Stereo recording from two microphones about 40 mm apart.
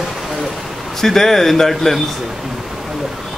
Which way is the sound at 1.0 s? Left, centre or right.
Centre.